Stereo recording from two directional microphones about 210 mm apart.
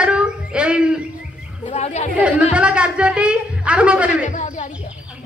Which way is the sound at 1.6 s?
30° left (ahead or behind).